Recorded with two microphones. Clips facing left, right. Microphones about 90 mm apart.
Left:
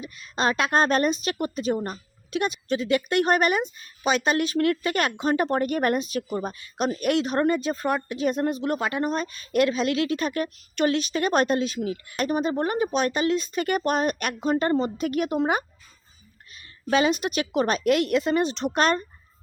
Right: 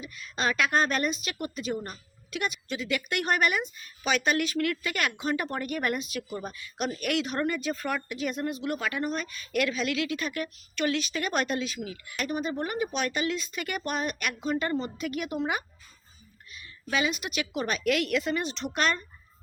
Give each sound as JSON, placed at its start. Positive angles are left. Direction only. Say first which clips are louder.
{"t": 0.0, "sound": "a woman's voice", "louder": "left 5 dB", "side_deg": 30}